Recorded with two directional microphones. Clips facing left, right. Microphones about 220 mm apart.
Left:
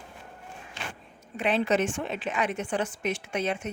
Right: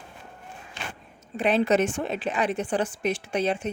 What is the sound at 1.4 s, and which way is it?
A woman's voice, 40° right (ahead or behind).